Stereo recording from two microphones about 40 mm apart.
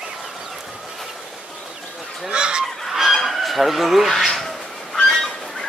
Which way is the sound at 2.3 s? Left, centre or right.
Right.